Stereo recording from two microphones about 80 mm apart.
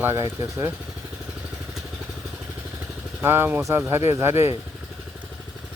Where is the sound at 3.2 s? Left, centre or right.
Right.